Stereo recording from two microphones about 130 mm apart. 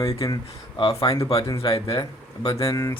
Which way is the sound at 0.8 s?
45° left (ahead or behind).